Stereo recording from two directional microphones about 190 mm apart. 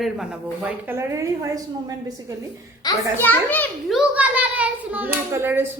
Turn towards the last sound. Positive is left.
turn(degrees=-10)  # may be behind; listen again after turning